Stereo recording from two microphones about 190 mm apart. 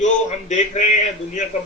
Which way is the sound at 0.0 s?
40° left (ahead or behind).